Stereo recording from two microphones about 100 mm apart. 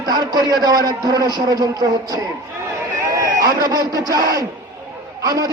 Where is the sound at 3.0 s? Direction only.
30° right (ahead or behind).